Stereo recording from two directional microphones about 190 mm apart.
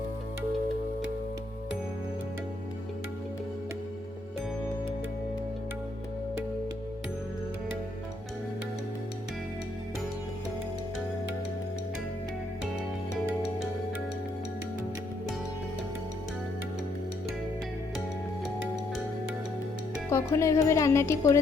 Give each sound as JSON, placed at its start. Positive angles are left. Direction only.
{"t": 20.1, "sound": "speech", "side_deg": 15}